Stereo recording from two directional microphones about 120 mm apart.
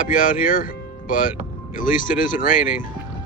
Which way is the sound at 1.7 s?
90° left.